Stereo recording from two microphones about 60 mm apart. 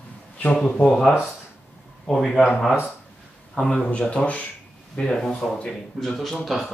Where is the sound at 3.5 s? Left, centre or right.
Centre.